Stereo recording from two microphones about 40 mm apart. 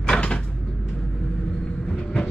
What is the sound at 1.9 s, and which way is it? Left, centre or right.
Vehicle, left.